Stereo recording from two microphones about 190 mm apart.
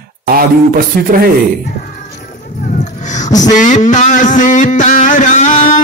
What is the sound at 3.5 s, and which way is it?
Music, 40° left (ahead or behind).